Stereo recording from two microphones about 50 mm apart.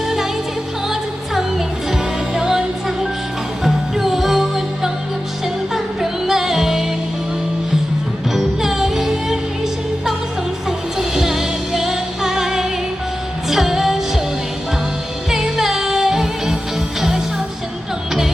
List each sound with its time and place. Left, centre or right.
0.9 s music: centre
8.3 s music: centre
10.7 s music: centre
15.3 s music: centre